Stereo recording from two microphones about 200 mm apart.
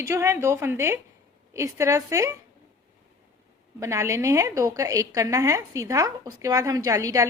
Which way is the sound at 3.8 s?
15° right (ahead or behind).